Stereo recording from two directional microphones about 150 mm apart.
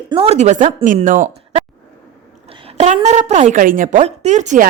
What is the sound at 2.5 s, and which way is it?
A woman's voice, 45° right (ahead or behind).